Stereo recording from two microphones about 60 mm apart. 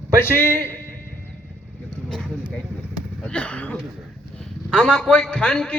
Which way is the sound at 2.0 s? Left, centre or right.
Centre.